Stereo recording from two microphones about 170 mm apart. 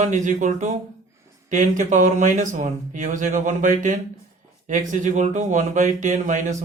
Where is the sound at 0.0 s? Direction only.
45° right (ahead or behind).